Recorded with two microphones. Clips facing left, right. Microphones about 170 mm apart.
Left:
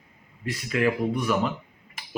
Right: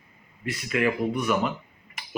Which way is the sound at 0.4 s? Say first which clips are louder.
Left 1 dB; 35° left (ahead or behind).